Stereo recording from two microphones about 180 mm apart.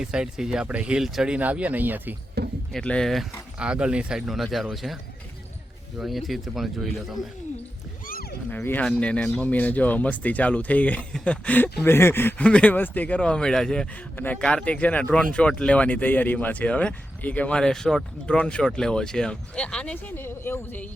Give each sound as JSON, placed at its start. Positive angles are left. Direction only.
{"t": 0.0, "sound": "speech", "side_deg": -5}
{"t": 2.4, "sound": "a sound", "side_deg": -65}
{"t": 2.7, "sound": "speech", "side_deg": 5}
{"t": 6.0, "sound": "speech", "side_deg": 0}
{"t": 8.0, "sound": "wild animals", "side_deg": 55}
{"t": 8.4, "sound": "speech", "side_deg": 10}